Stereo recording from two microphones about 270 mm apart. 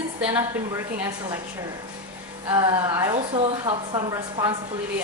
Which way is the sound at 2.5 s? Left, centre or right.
Centre.